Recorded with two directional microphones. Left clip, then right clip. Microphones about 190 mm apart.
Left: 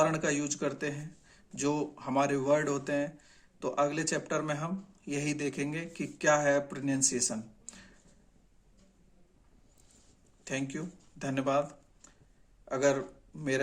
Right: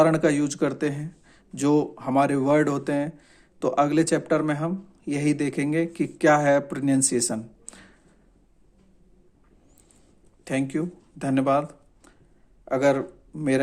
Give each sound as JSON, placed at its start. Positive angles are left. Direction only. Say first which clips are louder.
{"t": 0.0, "sound": "speech", "louder": "right 9 dB", "side_deg": -40}
{"t": 10.4, "sound": "speech", "louder": "right 10 dB", "side_deg": -35}